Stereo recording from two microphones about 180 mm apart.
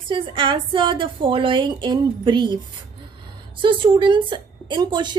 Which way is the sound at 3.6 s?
25° right (ahead or behind).